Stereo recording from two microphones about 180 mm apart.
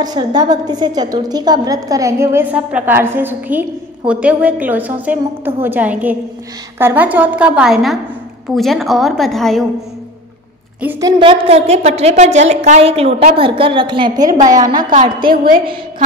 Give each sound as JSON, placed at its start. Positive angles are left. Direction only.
{"t": 0.0, "sound": "a woman's voice", "side_deg": -20}
{"t": 10.8, "sound": "a woman's voice", "side_deg": -10}
{"t": 11.1, "sound": "a woman's voice", "side_deg": -30}
{"t": 15.2, "sound": "a woman's voice", "side_deg": -55}